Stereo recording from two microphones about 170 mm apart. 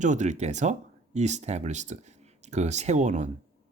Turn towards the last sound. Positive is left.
turn(degrees=-45)  # may be behind; listen again after turning